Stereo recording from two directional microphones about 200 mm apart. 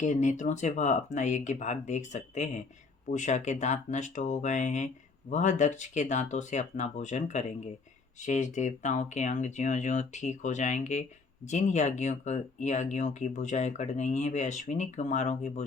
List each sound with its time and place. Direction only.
0.0 s speech: 35° left (ahead or behind)